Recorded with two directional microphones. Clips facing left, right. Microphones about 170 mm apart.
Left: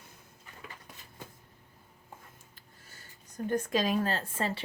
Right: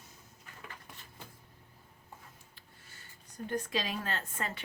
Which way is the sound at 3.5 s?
45° left (ahead or behind).